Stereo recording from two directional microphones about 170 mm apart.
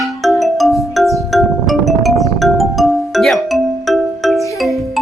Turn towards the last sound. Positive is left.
turn(degrees=0)  # may be behind; listen again after turning